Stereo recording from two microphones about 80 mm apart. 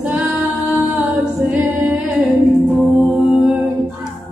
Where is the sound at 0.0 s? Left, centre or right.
Centre.